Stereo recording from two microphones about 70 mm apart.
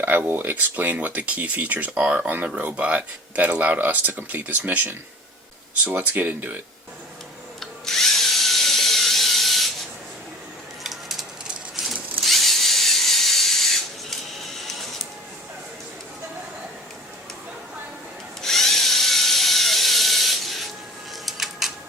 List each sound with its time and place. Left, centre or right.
0.0 s speech: right
7.6 s drill: centre
10.8 s a sound: centre
12.2 s tools: centre
18.4 s tools: centre
21.2 s a sound: centre